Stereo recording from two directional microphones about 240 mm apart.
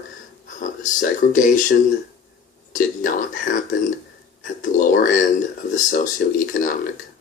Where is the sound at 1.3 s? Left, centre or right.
Left.